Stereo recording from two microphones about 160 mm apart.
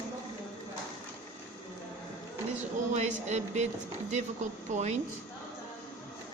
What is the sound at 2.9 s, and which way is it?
Speech, 50° right (ahead or behind).